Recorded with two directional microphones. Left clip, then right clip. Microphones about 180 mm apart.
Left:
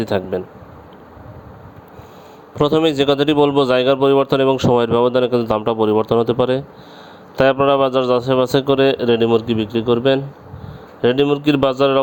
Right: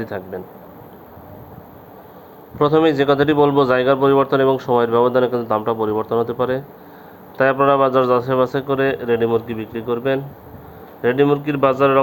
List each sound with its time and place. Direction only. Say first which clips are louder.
0.0 s speech: left 7 dB; 55° left (ahead or behind)
2.6 s speech: even; 55° left (ahead or behind)